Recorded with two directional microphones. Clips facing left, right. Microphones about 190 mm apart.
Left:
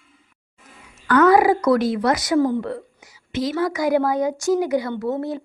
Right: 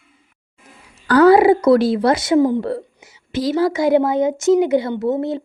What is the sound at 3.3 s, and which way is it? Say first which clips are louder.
Speech: right 4 dB; 35° right (ahead or behind).